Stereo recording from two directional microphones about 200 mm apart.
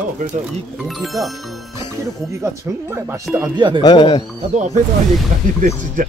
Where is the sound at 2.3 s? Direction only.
15° right (ahead or behind).